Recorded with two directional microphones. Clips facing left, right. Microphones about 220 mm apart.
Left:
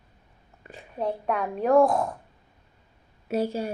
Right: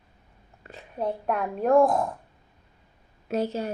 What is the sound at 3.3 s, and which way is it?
Speech, 10° left (ahead or behind).